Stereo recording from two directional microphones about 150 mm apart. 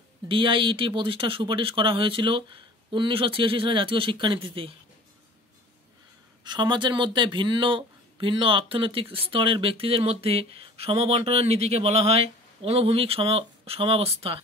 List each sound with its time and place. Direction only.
0.3 s speech: 35° right (ahead or behind)
6.4 s speech: 30° right (ahead or behind)